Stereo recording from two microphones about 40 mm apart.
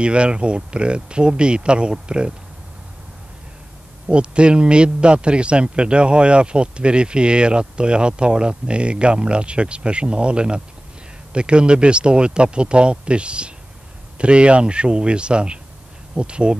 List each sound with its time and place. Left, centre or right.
0.0 s a man's voice: right
4.1 s a man's voice: right